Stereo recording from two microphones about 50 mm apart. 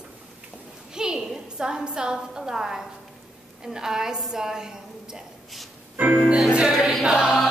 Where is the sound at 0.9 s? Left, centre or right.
Centre.